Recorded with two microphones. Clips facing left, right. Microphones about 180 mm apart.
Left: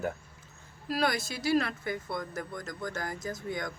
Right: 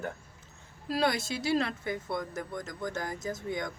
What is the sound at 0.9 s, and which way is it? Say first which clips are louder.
Speech: right 1 dB; 25° right (ahead or behind).